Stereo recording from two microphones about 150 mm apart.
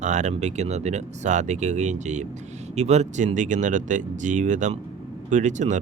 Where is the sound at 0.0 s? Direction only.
55° right (ahead or behind).